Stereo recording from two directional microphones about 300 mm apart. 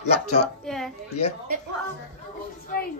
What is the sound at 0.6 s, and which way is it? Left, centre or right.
Speech, centre.